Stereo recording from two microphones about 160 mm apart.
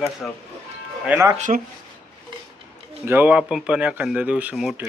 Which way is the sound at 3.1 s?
10° right (ahead or behind).